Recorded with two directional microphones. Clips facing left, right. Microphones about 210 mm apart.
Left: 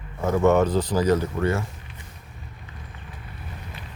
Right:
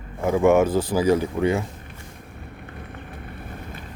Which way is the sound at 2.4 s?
60° right (ahead or behind).